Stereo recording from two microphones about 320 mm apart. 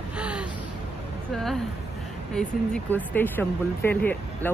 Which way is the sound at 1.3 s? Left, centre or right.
Centre.